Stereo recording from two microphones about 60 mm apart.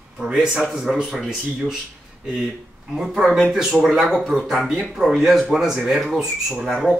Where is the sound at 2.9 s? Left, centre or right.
Centre.